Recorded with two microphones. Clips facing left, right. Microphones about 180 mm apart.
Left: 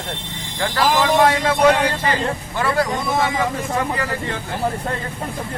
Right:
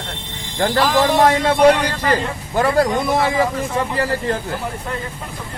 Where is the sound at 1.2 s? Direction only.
35° right (ahead or behind).